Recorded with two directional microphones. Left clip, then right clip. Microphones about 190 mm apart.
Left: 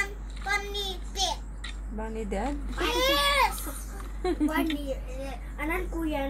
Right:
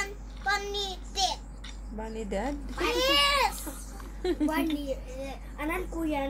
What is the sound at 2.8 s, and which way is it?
A child's voice, 15° right (ahead or behind).